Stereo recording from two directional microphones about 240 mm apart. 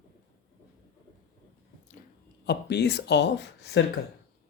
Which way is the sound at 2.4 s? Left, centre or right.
Left.